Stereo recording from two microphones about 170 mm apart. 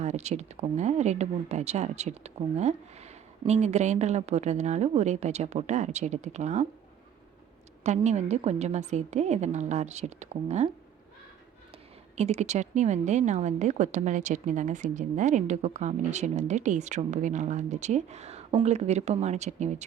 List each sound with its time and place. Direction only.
0.0 s speech: 40° right (ahead or behind)
7.9 s speech: 40° right (ahead or behind)
12.1 s speech: 40° right (ahead or behind)